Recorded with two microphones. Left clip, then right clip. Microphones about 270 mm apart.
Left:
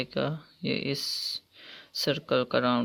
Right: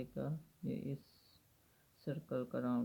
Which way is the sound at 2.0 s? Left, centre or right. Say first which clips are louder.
Left 16 dB; left.